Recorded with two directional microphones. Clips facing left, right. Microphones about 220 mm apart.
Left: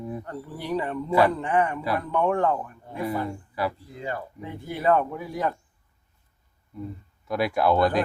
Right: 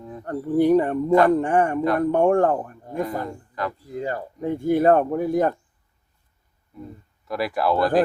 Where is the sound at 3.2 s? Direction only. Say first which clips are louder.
Even; 10° left (ahead or behind).